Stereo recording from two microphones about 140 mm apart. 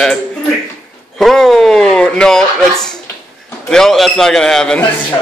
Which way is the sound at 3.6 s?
5° left (ahead or behind).